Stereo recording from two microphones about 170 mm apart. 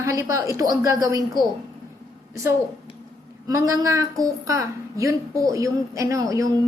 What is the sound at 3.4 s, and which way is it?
A woman's voice, 20° right (ahead or behind).